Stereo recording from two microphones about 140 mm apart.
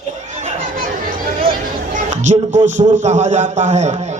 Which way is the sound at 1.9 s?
60° right (ahead or behind).